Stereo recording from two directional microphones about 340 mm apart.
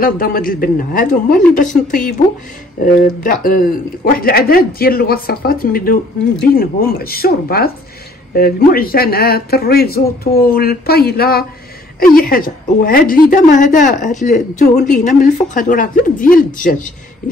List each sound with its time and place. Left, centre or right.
0.0 s a man's voice: left